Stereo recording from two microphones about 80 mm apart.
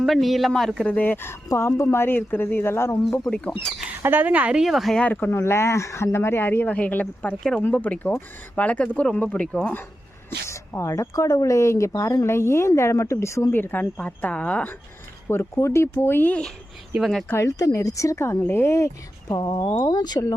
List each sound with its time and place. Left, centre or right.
0.0 s speech: centre
0.9 s speech: left
3.2 s speech: centre
4.0 s speech: right
4.6 s speech: centre
4.9 s speech: centre
5.3 s speech: left
10.2 s speech: left
13.5 s speech: left
15.3 s speech: left; by 16.5 s centre
17.0 s speech: centre
17.2 s speech: left
19.3 s speech: left